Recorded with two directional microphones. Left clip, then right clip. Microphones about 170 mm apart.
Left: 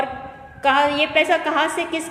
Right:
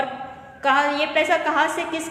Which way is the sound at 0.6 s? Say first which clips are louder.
Left 2 dB; 20° left (ahead or behind).